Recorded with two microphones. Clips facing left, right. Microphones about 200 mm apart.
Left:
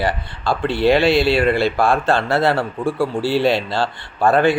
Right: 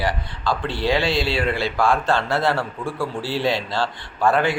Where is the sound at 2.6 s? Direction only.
30° left (ahead or behind).